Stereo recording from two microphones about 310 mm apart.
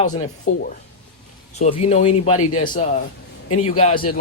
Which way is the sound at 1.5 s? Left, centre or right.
Left.